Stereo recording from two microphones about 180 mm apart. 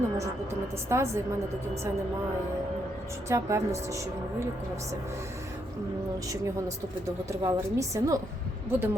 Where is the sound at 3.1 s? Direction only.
15° right (ahead or behind).